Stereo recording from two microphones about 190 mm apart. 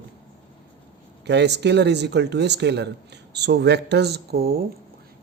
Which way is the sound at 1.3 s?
65° right (ahead or behind).